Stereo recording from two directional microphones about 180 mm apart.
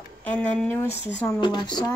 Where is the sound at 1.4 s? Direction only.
25° left (ahead or behind).